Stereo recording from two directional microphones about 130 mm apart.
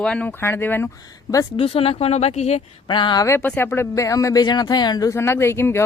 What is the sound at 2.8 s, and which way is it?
Speech, 35° left (ahead or behind).